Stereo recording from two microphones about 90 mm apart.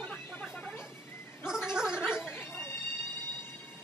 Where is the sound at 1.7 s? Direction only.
10° right (ahead or behind).